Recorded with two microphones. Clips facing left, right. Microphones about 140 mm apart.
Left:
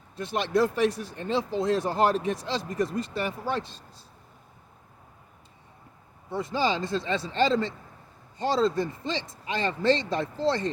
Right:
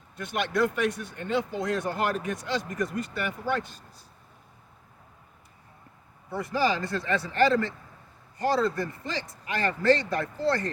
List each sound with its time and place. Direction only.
0.2 s speech: 30° left (ahead or behind)
6.3 s speech: 25° left (ahead or behind)